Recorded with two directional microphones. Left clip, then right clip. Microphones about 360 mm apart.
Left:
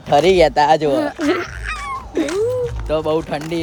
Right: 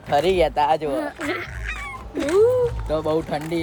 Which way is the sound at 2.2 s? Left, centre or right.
Left.